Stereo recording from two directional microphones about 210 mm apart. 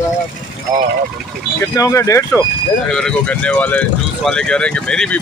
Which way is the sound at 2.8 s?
5° left (ahead or behind).